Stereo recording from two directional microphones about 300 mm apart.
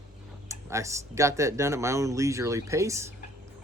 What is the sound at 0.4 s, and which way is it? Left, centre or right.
Speech, centre.